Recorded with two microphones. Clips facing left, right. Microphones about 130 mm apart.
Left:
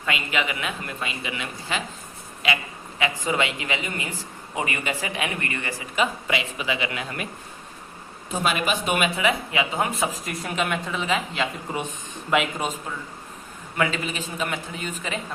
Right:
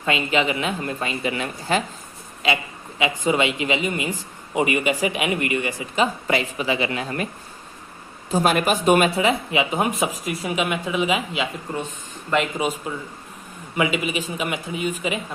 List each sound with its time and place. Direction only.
0.0 s a man's voice: 30° right (ahead or behind)
3.0 s a man's voice: 20° right (ahead or behind)
6.0 s a man's voice: 40° right (ahead or behind)
8.3 s speech: 40° right (ahead or behind); by 11.4 s 10° right (ahead or behind)
12.3 s speech: 5° left (ahead or behind)
13.7 s a man's voice: 15° right (ahead or behind)